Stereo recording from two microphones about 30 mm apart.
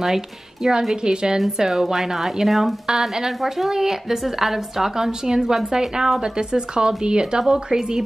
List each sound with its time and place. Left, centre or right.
0.0 s speech: centre
1.0 s speech: right
1.6 s a woman's voice: centre
4.9 s speech: centre